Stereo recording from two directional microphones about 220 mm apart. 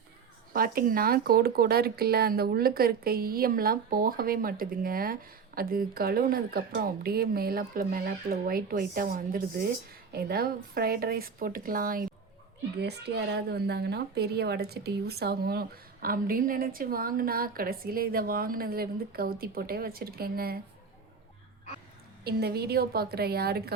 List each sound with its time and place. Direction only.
0.5 s speech: 40° right (ahead or behind)
22.2 s speech: 45° right (ahead or behind)